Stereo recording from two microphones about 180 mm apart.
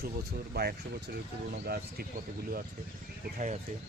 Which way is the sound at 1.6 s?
60° right (ahead or behind).